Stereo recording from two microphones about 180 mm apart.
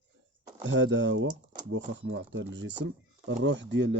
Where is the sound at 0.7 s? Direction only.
90° right.